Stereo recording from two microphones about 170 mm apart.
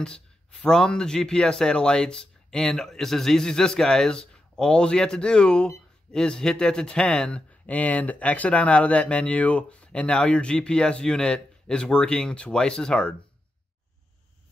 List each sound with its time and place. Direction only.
0.0 s speech: 5° left (ahead or behind)